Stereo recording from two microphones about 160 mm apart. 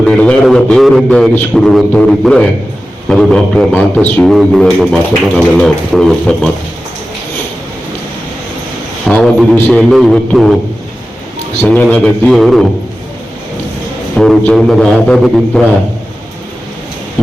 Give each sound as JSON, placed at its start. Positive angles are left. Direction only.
{"t": 0.1, "sound": "a man's voice", "side_deg": 10}
{"t": 9.0, "sound": "a man's voice", "side_deg": 5}
{"t": 11.6, "sound": "a man's voice", "side_deg": 10}
{"t": 14.2, "sound": "a man's voice", "side_deg": 5}